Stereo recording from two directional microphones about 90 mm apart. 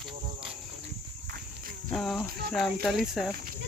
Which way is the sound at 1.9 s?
5° left (ahead or behind).